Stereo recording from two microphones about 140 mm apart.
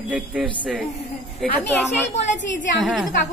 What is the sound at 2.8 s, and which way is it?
Speech, centre (ahead or behind).